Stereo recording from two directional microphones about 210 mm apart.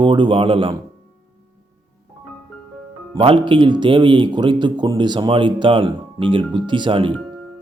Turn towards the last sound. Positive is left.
turn(degrees=-25)  # may be behind; listen again after turning